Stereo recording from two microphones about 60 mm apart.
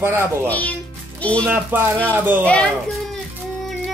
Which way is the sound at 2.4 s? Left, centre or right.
Centre.